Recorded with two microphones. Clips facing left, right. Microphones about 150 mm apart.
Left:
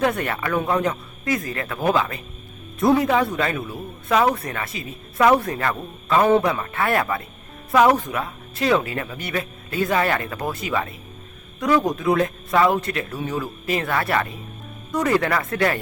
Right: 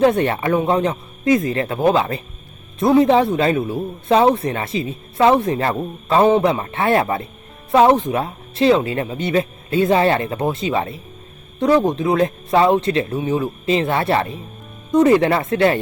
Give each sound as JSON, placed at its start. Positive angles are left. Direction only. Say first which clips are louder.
{"t": 0.0, "sound": "a man's voice", "louder": "right 7 dB", "side_deg": -25}